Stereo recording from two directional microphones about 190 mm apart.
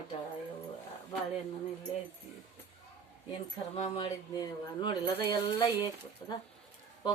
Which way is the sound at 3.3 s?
30° left (ahead or behind).